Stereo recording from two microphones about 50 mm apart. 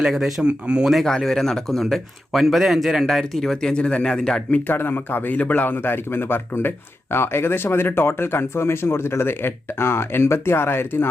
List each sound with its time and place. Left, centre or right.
0.0 s speech: centre
0.4 s speech: centre
1.0 s speech: centre
4.7 s a man's voice: left
5.7 s speech: left